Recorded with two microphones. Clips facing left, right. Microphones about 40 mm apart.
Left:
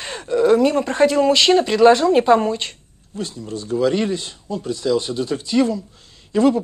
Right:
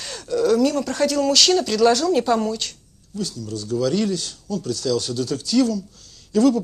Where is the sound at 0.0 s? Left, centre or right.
Left.